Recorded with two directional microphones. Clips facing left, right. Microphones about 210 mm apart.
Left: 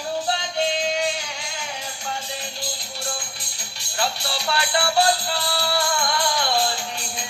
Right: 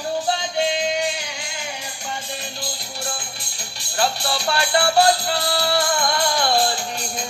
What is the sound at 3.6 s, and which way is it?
Music, 50° right (ahead or behind).